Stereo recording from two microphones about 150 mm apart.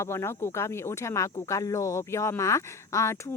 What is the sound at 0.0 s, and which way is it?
Speech, 15° left (ahead or behind).